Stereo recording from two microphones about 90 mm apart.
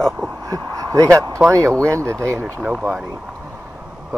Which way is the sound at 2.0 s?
30° right (ahead or behind).